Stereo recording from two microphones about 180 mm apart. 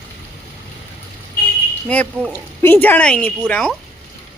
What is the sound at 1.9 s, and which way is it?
Speech, 10° left (ahead or behind).